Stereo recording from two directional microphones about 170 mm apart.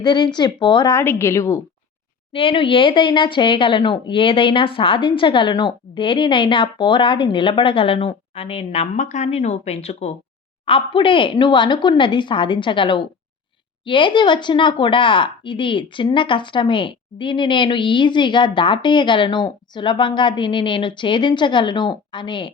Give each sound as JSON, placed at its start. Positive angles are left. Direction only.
{"t": 0.0, "sound": "a woman's voice", "side_deg": 25}
{"t": 2.3, "sound": "speech", "side_deg": 30}